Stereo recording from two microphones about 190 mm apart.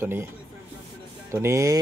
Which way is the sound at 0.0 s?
10° right (ahead or behind).